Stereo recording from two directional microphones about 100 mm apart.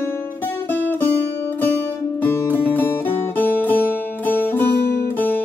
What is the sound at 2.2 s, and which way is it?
Music, 20° left (ahead or behind).